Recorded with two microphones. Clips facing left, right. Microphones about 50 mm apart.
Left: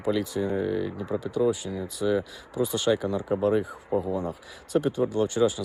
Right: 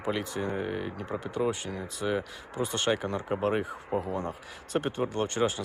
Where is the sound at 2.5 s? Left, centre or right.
Right.